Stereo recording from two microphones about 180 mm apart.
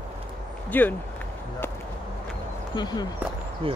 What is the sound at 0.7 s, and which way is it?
Speech, 10° left (ahead or behind).